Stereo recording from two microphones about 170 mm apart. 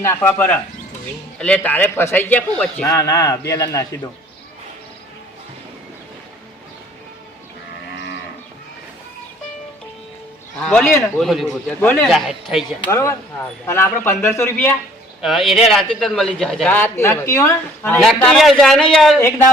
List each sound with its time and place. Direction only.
0.0 s a man's voice: 15° left (ahead or behind)
10.6 s a man's voice: 5° left (ahead or behind)
11.8 s speech: 10° left (ahead or behind)
12.1 s a man's voice: centre (ahead or behind)
12.9 s speech: 15° left (ahead or behind)
15.2 s a man's voice: centre (ahead or behind)